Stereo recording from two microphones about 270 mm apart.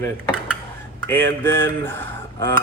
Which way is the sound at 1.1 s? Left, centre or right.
Centre.